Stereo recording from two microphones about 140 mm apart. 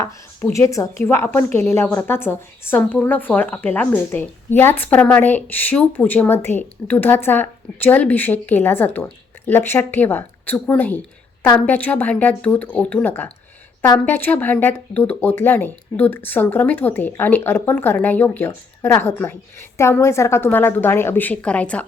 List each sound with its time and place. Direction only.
0.5 s a woman's voice: 20° left (ahead or behind)